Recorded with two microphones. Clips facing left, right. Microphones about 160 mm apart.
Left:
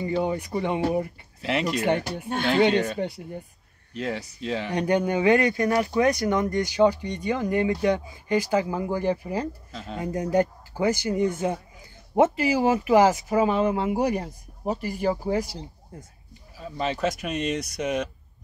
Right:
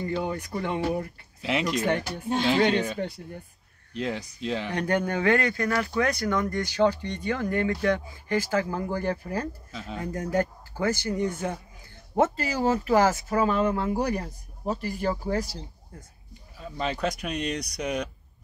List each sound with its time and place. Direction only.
0.0 s speech: 15° left (ahead or behind)
1.4 s speech: centre (ahead or behind)
4.7 s speech: 15° left (ahead or behind)
9.7 s speech: centre (ahead or behind)
9.9 s speech: 20° left (ahead or behind)
16.5 s speech: centre (ahead or behind)